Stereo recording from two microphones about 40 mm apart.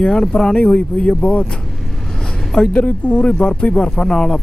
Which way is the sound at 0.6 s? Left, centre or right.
Left.